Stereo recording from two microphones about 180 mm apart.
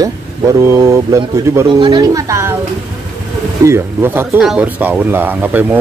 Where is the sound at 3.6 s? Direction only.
15° right (ahead or behind).